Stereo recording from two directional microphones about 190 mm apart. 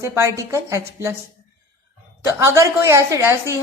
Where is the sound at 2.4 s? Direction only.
15° right (ahead or behind).